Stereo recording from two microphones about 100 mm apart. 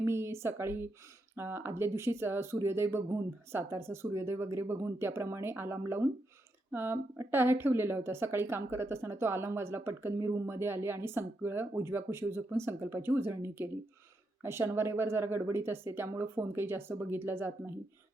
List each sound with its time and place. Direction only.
0.0 s speech: 25° right (ahead or behind)